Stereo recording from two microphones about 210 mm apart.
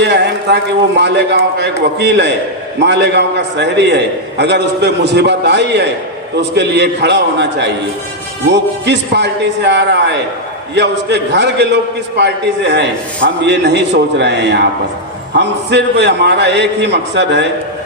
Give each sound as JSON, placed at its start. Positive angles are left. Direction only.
{"t": 0.0, "sound": "a man's voice", "side_deg": -55}